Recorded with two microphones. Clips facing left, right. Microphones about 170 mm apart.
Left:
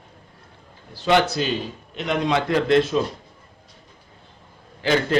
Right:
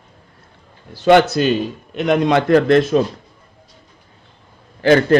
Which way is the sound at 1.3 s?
60° right (ahead or behind).